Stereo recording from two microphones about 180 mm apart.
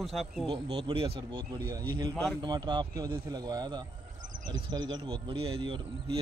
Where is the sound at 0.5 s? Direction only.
30° right (ahead or behind).